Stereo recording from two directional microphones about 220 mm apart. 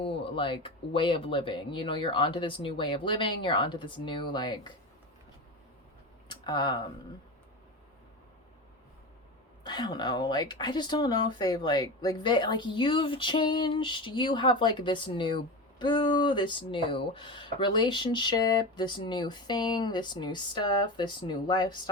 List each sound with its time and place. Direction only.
0.0 s speech: 25° left (ahead or behind)
6.2 s speech: 20° left (ahead or behind)
9.6 s speech: 20° left (ahead or behind)